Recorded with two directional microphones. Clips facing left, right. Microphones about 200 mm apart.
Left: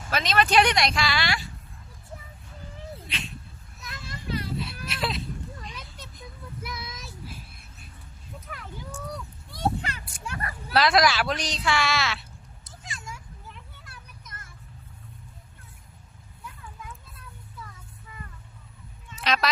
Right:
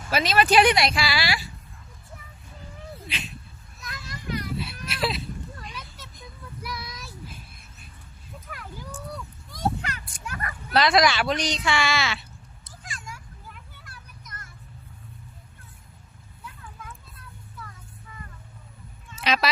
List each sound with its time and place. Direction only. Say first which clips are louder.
0.1 s speech: right 2 dB; 5° right (ahead or behind)
4.1 s children playing: even; 30° left (ahead or behind)
4.5 s a sound: even; centre (ahead or behind)
6.6 s child singing: right 2 dB; 25° left (ahead or behind)
9.8 s a sound: even; 30° left (ahead or behind)
10.8 s a woman's voice: right 1 dB; centre (ahead or behind)
19.1 s honk: right 1 dB; 5° right (ahead or behind)